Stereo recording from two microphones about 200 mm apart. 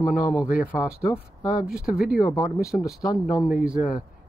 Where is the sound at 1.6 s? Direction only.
5° right (ahead or behind).